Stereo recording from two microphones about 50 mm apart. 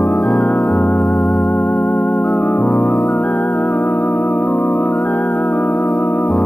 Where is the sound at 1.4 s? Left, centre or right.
Left.